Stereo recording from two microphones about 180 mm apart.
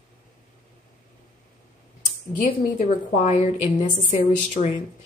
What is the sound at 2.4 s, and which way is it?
A woman's voice, 45° left (ahead or behind).